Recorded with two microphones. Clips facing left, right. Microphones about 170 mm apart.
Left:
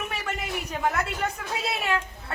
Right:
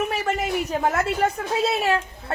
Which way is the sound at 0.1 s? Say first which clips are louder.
Right 8 dB; 40° right (ahead or behind).